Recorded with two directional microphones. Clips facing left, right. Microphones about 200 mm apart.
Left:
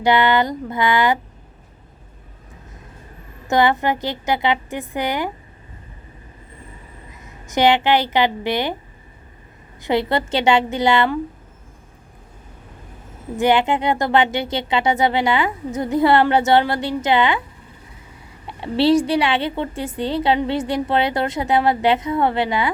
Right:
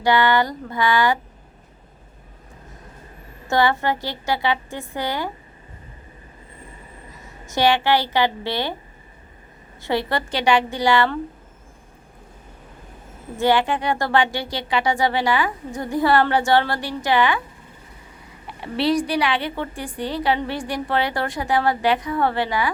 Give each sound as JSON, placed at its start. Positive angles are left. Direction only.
{"t": 0.0, "sound": "a woman's voice", "side_deg": 20}
{"t": 3.4, "sound": "a woman's voice", "side_deg": 20}
{"t": 7.4, "sound": "a woman's voice", "side_deg": 20}
{"t": 9.8, "sound": "a woman's voice", "side_deg": 20}
{"t": 13.4, "sound": "a woman's voice", "side_deg": 20}
{"t": 18.4, "sound": "a woman's voice", "side_deg": 25}